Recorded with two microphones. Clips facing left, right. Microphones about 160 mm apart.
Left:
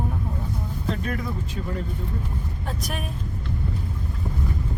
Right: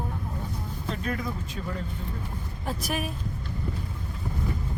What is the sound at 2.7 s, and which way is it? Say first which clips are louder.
Speech: right 3 dB; 5° right (ahead or behind).